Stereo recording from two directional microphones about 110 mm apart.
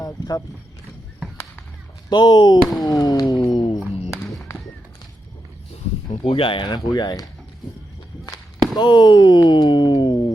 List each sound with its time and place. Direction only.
0.0 s vehicle: 35° left (ahead or behind)
2.0 s speech: 40° left (ahead or behind)
4.1 s music: 25° left (ahead or behind)
6.1 s speech: 55° left (ahead or behind)
8.7 s speech: 40° left (ahead or behind)